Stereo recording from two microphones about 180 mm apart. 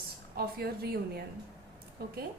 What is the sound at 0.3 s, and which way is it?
Speech, 60° right (ahead or behind).